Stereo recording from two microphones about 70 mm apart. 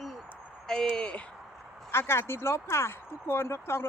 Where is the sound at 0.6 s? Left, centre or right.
Centre.